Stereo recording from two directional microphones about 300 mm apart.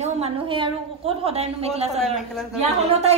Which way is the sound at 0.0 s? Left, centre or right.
Right.